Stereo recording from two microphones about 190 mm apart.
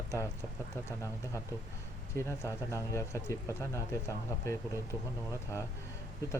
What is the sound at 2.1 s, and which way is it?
Speech, 15° left (ahead or behind).